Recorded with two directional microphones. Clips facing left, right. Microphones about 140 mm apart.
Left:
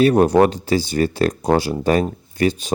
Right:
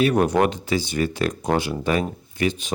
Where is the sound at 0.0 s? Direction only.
35° left (ahead or behind).